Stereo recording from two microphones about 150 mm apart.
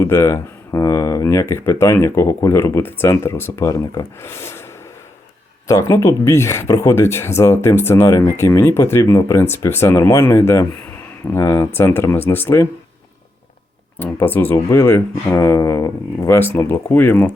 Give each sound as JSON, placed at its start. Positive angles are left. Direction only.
{"t": 0.0, "sound": "speech", "side_deg": 15}
{"t": 5.6, "sound": "speech", "side_deg": 20}
{"t": 14.0, "sound": "speech", "side_deg": 10}